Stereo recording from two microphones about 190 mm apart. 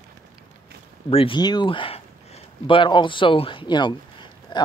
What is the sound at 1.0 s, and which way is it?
Speech, 30° left (ahead or behind).